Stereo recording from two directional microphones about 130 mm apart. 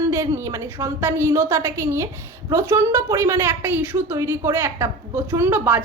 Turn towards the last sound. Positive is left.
turn(degrees=-10)  # may be behind; listen again after turning